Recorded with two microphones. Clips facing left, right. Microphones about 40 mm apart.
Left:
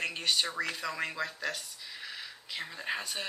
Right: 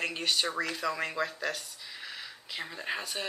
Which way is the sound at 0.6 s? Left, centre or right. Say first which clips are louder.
Right 2 dB; centre.